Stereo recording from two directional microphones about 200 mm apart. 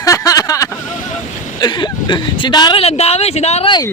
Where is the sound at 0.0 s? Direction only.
15° left (ahead or behind).